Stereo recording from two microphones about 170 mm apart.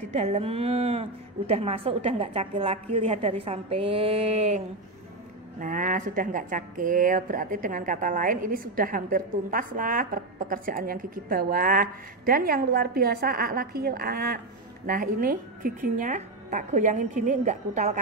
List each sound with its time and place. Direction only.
0.1 s a woman's voice: 40° right (ahead or behind)
5.6 s a woman's voice: 50° right (ahead or behind)